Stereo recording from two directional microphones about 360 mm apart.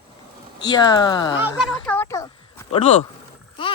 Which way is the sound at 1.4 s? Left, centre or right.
Centre.